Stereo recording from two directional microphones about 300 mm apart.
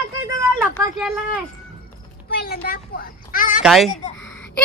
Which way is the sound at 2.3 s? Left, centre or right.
Left.